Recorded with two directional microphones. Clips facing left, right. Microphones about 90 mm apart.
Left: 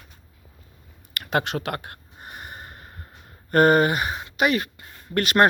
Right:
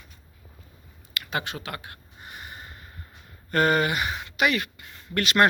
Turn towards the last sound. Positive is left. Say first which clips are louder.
# left 2 dB
turn(degrees=40)  # may be behind; listen again after turning